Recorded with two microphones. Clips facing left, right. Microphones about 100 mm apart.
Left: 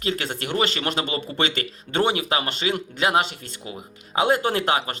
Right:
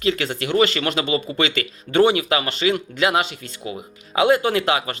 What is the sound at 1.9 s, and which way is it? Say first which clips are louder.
Speech: right 6 dB; 25° left (ahead or behind).